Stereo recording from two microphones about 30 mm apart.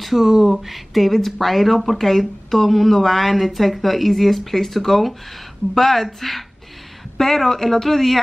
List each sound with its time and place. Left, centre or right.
0.0 s speech: centre
0.3 s speech: centre
0.6 s speech: centre